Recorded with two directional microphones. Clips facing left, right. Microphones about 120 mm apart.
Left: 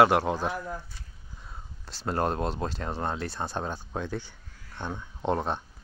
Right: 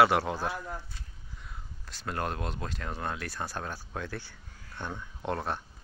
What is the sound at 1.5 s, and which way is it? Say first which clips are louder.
Speech: left 3 dB; 30° left (ahead or behind).